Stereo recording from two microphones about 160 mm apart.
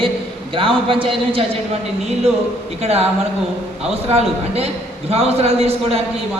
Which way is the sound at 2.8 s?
40° right (ahead or behind).